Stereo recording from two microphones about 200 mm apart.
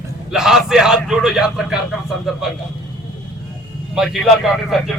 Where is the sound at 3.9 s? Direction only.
Centre (ahead or behind).